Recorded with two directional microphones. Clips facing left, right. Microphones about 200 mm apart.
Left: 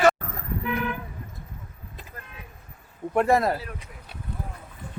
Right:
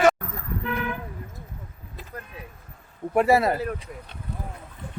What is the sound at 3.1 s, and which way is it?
Speech, 5° right (ahead or behind).